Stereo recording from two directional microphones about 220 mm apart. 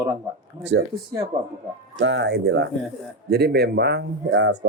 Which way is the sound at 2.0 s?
55° right (ahead or behind).